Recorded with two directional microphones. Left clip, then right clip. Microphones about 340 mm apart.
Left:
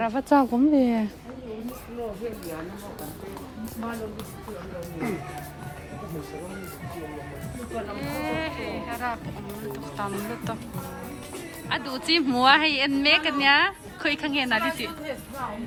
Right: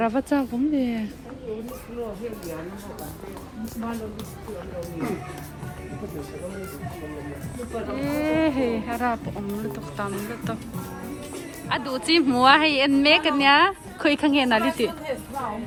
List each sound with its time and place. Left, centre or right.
0.0 s speech: centre
0.3 s speech: centre
7.9 s a woman's voice: centre
11.7 s a woman's voice: centre